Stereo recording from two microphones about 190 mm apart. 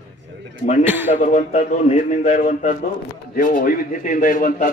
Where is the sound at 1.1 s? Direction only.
40° left (ahead or behind).